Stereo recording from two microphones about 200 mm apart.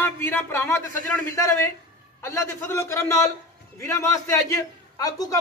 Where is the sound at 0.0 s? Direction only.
10° left (ahead or behind).